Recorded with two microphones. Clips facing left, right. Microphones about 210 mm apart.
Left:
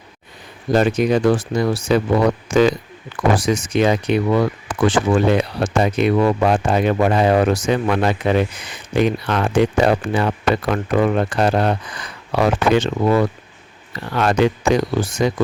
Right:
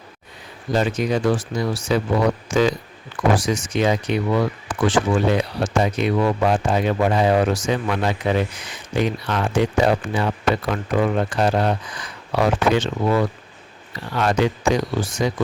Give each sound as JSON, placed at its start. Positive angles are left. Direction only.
{"t": 0.7, "sound": "a man's voice", "side_deg": 60}